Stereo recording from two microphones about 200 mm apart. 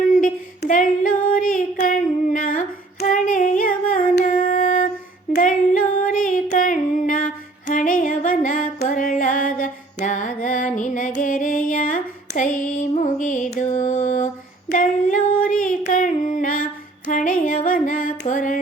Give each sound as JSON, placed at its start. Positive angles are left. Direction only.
{"t": 0.2, "sound": "female singing", "side_deg": 40}
{"t": 7.7, "sound": "music", "side_deg": 40}
{"t": 14.7, "sound": "female singing", "side_deg": 40}
{"t": 17.1, "sound": "music", "side_deg": 40}